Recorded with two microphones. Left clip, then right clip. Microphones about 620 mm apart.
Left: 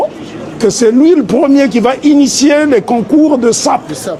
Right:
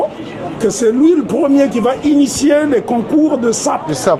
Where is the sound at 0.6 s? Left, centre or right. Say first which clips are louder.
Left 4 dB; left.